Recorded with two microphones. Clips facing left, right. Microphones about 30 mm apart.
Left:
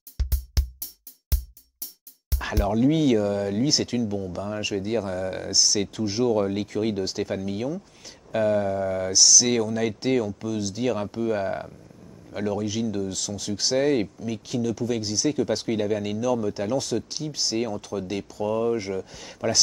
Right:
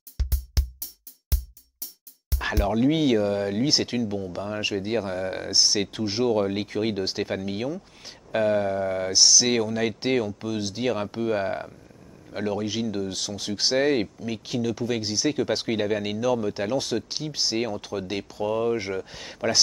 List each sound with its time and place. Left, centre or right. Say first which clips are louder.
0.2 s music: even; centre
2.6 s speech: left 1 dB; right